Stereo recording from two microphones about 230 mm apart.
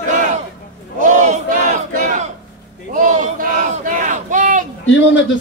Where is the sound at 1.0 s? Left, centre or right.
Right.